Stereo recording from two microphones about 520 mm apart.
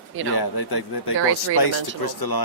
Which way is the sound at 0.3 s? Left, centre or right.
Left.